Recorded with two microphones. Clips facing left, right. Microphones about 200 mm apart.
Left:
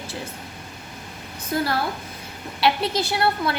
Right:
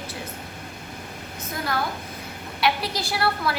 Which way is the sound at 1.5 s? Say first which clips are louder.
Left 4 dB; 30° left (ahead or behind).